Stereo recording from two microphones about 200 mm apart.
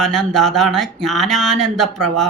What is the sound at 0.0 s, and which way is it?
Speech, 5° left (ahead or behind).